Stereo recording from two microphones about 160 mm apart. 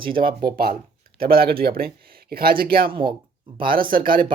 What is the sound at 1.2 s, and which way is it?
Speech, 70° right (ahead or behind).